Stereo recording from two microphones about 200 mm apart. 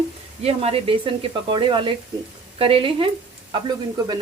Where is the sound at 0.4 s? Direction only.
30° right (ahead or behind).